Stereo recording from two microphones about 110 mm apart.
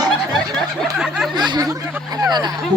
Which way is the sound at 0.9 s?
5° right (ahead or behind).